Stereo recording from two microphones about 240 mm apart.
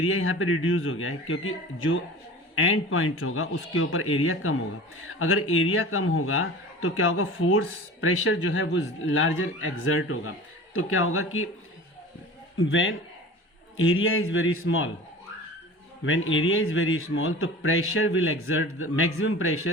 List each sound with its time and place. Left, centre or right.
0.0 s a man's voice: left
12.5 s a man's voice: left
16.0 s a man's voice: left